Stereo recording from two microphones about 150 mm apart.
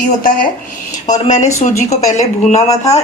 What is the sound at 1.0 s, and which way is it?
A man's voice, 55° left (ahead or behind).